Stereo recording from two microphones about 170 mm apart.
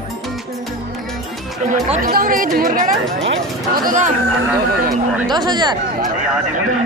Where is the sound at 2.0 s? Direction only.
55° right (ahead or behind).